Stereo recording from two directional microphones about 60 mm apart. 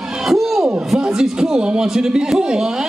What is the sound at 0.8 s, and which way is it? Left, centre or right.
A man's voice, centre.